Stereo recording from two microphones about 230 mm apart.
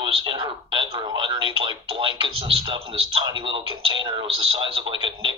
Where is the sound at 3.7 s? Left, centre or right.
Centre.